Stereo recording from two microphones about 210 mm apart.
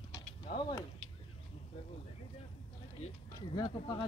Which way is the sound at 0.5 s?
30° left (ahead or behind).